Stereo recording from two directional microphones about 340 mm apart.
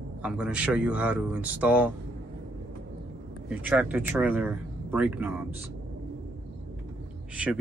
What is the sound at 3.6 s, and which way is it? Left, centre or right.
Speech, centre.